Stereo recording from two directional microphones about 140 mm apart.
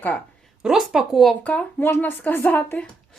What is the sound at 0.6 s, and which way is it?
Speech, 5° right (ahead or behind).